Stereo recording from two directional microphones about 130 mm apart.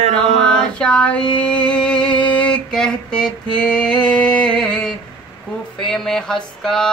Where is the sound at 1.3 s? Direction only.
10° left (ahead or behind).